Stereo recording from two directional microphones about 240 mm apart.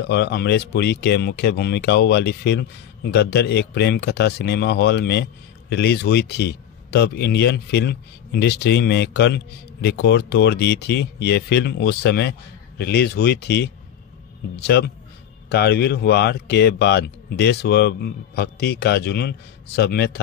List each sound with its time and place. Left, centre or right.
0.0 s a man's voice: left